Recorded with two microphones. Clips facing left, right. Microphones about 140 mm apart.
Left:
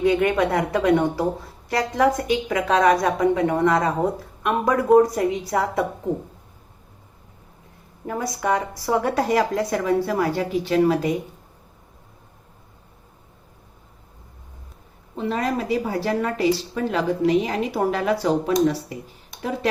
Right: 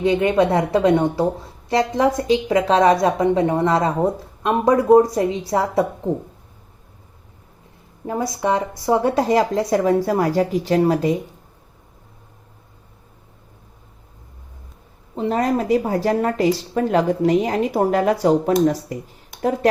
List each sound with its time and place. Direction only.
0.0 s a woman's voice: 25° right (ahead or behind)
8.0 s a woman's voice: 25° right (ahead or behind)
15.1 s speech: 35° right (ahead or behind)